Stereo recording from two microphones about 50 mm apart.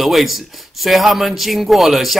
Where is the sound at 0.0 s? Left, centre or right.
Centre.